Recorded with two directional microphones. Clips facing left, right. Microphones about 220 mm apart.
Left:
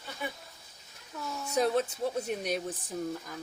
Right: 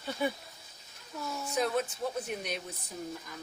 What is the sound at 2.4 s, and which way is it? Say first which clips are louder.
Speech: left 6 dB; 40° left (ahead or behind).